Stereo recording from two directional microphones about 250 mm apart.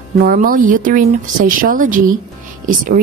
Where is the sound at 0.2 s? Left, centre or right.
Right.